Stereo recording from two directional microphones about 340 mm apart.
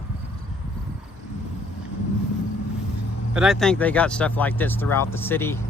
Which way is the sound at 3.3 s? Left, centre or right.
Centre.